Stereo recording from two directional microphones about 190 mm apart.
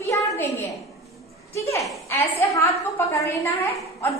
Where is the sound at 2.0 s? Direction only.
15° left (ahead or behind).